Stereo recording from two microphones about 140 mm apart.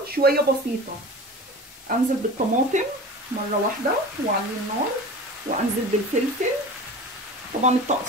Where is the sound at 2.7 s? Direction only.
60° right (ahead or behind).